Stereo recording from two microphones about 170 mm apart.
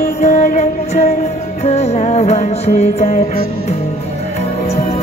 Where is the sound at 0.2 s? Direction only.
40° left (ahead or behind).